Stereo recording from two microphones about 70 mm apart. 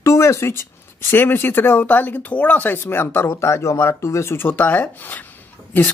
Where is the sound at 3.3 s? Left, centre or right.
Left.